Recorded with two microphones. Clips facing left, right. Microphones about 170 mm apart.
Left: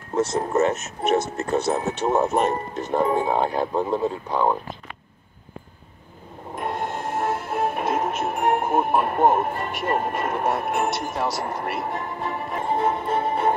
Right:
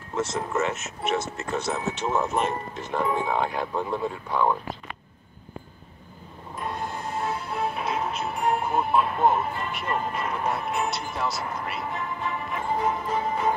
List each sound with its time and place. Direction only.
0.1 s speech: 40° left (ahead or behind)
6.5 s music: 55° left (ahead or behind)
11.9 s music: 45° left (ahead or behind)
12.7 s music: 30° left (ahead or behind)